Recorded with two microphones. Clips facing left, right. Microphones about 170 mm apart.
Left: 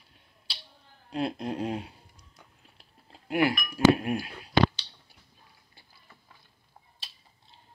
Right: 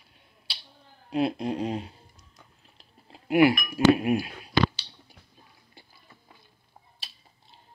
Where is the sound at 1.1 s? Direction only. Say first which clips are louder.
Right 4 dB; 5° right (ahead or behind).